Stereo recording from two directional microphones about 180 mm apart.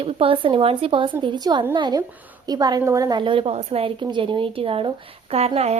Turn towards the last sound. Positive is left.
turn(degrees=-35)  # may be behind; listen again after turning